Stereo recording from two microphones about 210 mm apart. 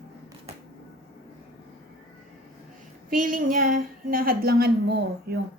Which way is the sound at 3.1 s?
40° right (ahead or behind).